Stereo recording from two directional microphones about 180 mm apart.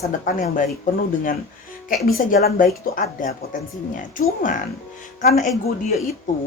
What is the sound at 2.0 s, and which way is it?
Speech, 55° left (ahead or behind).